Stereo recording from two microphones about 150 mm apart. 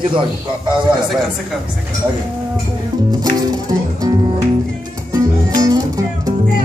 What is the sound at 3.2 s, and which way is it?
Speech, 25° right (ahead or behind).